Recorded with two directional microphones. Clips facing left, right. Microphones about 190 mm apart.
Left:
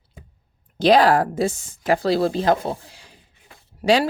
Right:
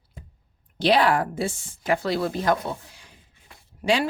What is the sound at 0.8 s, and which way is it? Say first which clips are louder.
A woman's voice: left 5 dB; 40° left (ahead or behind).